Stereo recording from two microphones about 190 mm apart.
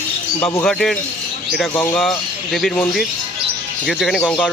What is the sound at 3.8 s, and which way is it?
Speech, centre (ahead or behind).